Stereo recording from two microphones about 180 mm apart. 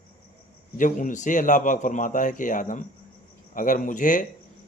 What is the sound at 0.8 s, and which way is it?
Speech, 45° left (ahead or behind).